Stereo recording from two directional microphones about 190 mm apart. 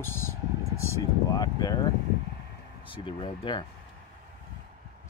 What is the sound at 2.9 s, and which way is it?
Speech, 25° left (ahead or behind).